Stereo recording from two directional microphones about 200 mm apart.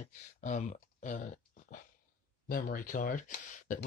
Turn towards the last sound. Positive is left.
turn(degrees=40)  # may be behind; listen again after turning